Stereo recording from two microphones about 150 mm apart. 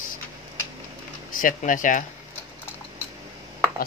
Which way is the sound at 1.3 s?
65° left (ahead or behind).